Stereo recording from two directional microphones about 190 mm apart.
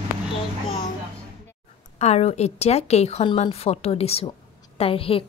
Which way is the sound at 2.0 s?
35° left (ahead or behind).